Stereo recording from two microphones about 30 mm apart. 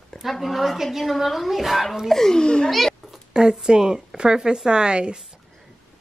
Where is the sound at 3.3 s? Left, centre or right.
Right.